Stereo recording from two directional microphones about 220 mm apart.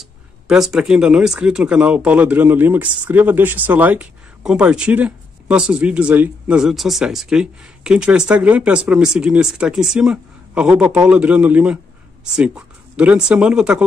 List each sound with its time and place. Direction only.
0.0 s speech: centre (ahead or behind)